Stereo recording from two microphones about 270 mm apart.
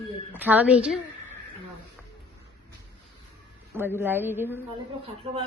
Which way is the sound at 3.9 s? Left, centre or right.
Centre.